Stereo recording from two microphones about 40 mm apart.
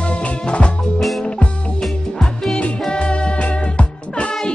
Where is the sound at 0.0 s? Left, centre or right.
Left.